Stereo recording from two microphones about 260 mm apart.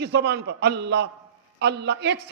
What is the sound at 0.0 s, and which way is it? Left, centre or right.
A man's voice, right.